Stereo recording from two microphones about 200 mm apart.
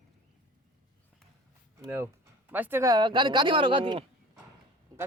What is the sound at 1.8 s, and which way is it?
Speech, 10° right (ahead or behind).